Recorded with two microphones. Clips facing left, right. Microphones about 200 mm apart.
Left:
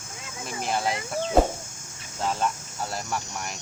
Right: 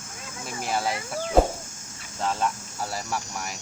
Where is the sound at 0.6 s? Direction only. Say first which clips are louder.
Even; 5° right (ahead or behind).